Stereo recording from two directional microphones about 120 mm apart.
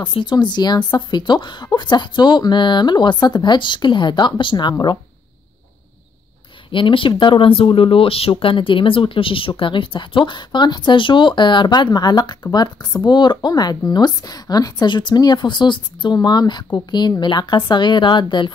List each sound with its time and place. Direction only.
0.0 s a woman's voice: 40° left (ahead or behind)
6.7 s a woman's voice: 45° left (ahead or behind)